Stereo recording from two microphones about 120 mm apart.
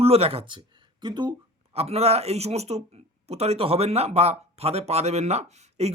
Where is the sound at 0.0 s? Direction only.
55° right (ahead or behind).